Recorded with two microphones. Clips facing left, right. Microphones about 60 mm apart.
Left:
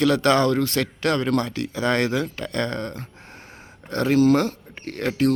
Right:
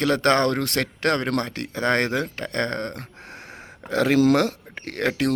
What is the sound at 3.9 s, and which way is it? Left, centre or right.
Speech, right.